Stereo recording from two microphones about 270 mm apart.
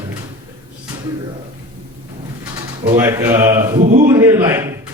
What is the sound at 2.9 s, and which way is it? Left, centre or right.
Speech, centre.